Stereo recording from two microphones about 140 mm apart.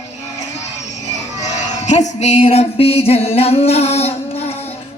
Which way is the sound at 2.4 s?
45° left (ahead or behind).